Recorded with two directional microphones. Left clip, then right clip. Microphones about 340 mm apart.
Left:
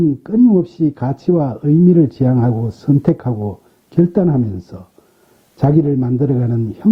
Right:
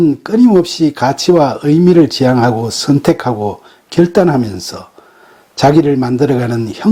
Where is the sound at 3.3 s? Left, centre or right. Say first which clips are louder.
Right 8 dB; right.